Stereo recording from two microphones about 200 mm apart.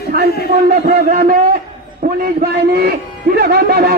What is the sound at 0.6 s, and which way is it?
A man's voice, 50° right (ahead or behind).